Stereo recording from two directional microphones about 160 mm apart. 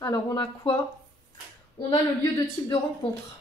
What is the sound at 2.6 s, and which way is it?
Speech, 25° left (ahead or behind).